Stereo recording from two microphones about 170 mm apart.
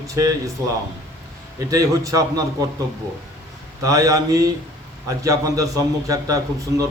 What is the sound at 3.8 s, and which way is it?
A man's voice, 20° right (ahead or behind).